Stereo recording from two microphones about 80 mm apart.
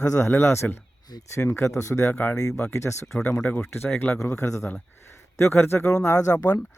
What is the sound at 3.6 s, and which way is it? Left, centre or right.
A man's voice, left.